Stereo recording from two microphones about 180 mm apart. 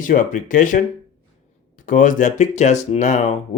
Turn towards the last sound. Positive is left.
turn(degrees=40)  # may be behind; listen again after turning